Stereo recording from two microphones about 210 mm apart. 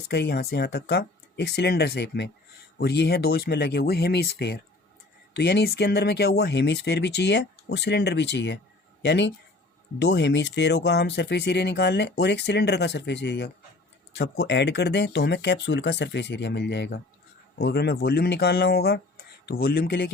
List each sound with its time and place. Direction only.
0.1 s speech: 50° left (ahead or behind)